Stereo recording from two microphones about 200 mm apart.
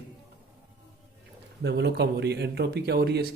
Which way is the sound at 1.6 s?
60° right (ahead or behind).